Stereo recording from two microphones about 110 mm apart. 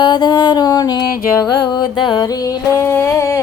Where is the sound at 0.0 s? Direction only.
40° left (ahead or behind).